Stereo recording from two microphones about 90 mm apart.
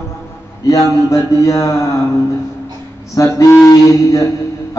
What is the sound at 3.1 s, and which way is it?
A man's voice, 35° left (ahead or behind).